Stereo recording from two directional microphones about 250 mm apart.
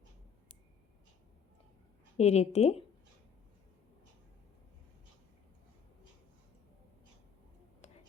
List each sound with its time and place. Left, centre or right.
2.1 s a woman's voice: left